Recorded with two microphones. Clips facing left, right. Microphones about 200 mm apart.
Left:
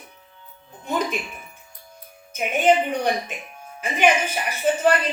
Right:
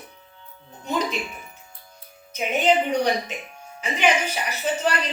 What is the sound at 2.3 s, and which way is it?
Speech, 55° left (ahead or behind).